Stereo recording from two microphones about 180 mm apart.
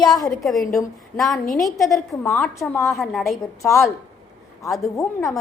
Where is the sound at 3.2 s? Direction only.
15° left (ahead or behind).